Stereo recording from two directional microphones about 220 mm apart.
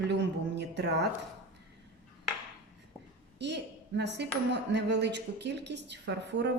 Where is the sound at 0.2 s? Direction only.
55° right (ahead or behind).